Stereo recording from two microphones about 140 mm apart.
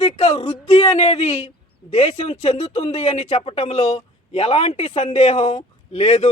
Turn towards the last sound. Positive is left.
turn(degrees=50)  # may be behind; listen again after turning